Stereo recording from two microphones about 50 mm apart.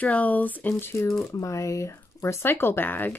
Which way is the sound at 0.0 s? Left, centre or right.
Left.